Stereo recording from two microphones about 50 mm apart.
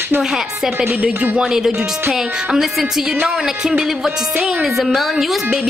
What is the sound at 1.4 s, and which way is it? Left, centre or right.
A woman's voice, centre.